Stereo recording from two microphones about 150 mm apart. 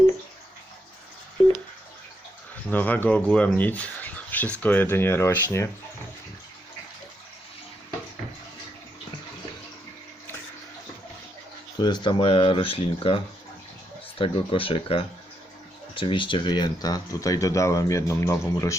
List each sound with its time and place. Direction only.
2.6 s speech: 10° left (ahead or behind)
11.8 s speech: 30° left (ahead or behind)